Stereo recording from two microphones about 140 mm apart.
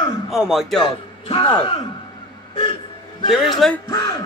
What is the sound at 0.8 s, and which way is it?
Speech, 35° left (ahead or behind).